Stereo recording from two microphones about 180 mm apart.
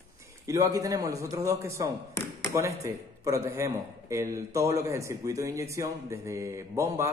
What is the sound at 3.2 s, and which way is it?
A man's voice, 20° right (ahead or behind).